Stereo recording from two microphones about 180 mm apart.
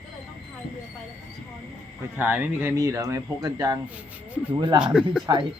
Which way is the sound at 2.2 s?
10° right (ahead or behind).